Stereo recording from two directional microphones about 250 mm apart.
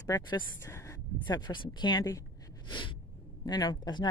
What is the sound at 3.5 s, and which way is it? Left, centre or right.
Speech, centre.